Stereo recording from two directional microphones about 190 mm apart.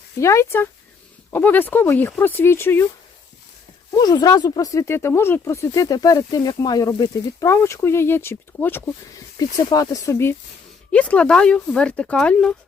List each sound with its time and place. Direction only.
0.2 s speech: 15° left (ahead or behind)
3.9 s speech: 20° left (ahead or behind); by 12.5 s 5° left (ahead or behind)